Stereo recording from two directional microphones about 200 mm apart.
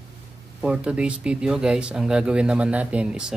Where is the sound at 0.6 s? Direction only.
5° right (ahead or behind).